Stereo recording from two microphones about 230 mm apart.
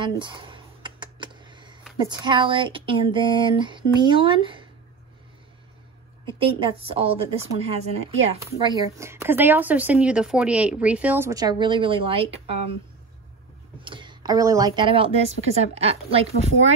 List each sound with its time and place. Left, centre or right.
0.0 s a sound: right
2.0 s speech: centre
6.4 s speech: right
8.5 s speech: centre
13.8 s a sound: right
14.8 s speech: right